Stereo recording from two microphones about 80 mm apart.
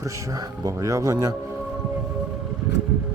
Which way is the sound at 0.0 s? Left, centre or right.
Right.